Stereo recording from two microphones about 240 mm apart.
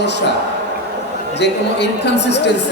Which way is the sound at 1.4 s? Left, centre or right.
Left.